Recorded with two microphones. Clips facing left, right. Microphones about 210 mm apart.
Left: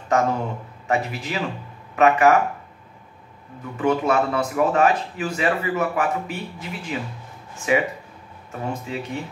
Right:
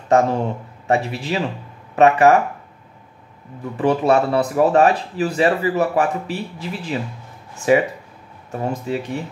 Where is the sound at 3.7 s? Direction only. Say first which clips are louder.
Right 4 dB; 30° right (ahead or behind).